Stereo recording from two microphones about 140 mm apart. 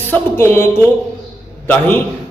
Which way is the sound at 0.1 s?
15° left (ahead or behind).